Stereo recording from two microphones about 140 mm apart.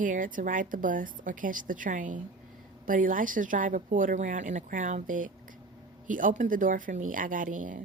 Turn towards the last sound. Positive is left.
turn(degrees=-70)  # may be behind; listen again after turning